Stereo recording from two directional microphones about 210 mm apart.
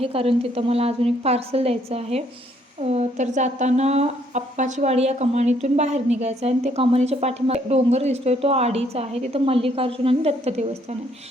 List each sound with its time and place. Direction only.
0.0 s a woman's voice: 25° right (ahead or behind)